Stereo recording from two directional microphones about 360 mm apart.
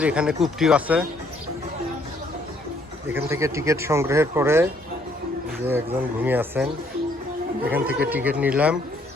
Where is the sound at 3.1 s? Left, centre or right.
Centre.